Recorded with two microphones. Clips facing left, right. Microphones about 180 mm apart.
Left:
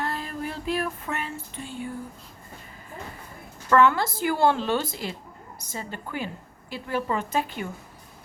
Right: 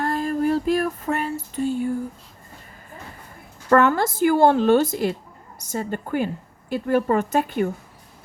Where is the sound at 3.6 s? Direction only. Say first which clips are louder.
Right 3 dB; 45° right (ahead or behind).